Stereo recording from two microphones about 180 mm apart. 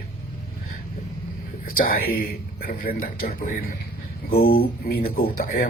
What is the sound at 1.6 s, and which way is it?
Speech, 55° left (ahead or behind).